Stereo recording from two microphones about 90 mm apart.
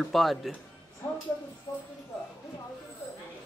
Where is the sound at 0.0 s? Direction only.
Centre (ahead or behind).